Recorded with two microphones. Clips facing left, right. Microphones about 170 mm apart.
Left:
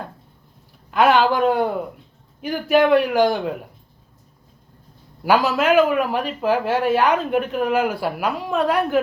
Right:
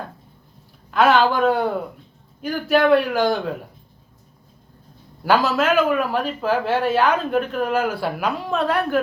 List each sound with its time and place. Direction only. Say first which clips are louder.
0.9 s speech: even; 15° left (ahead or behind)
5.2 s speech: left 1 dB; 10° left (ahead or behind)